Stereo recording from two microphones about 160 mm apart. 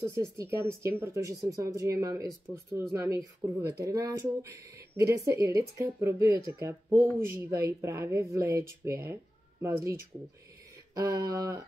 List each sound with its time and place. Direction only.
0.2 s speech: 15° right (ahead or behind)
11.0 s speech: 20° right (ahead or behind)